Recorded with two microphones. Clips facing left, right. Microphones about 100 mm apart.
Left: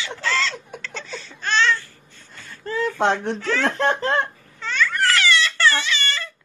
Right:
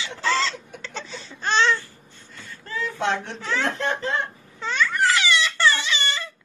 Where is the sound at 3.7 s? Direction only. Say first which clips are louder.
Left 5 dB; 55° left (ahead or behind).